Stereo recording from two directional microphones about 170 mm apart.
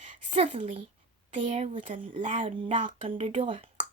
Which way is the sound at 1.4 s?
45° right (ahead or behind).